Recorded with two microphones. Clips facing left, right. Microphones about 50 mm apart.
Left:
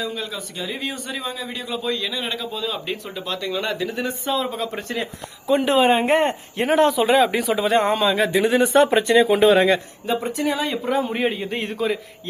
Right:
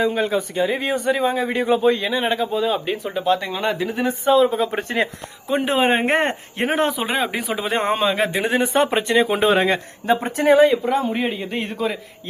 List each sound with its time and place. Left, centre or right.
0.0 s speech: right
2.8 s speech: centre
4.7 s speech: right
6.1 s speech: right; by 7.9 s centre
7.9 s speech: right
10.8 s a man's voice: centre